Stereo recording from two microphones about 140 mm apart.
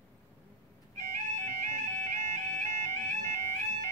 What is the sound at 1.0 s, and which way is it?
Music, 60° right (ahead or behind).